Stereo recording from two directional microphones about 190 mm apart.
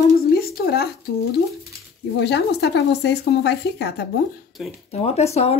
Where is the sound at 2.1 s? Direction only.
65° left (ahead or behind).